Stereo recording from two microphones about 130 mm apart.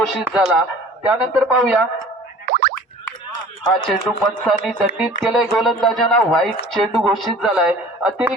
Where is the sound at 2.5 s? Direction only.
90° right.